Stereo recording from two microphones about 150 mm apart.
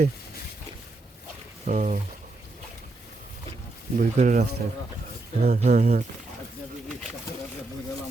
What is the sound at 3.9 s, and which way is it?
Speech, 55° right (ahead or behind).